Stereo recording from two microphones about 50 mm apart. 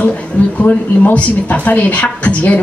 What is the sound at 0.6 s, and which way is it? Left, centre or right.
Speech, left.